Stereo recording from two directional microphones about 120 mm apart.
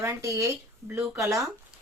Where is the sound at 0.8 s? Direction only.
15° right (ahead or behind).